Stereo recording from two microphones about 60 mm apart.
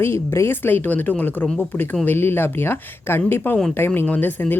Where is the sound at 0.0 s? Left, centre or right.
Left.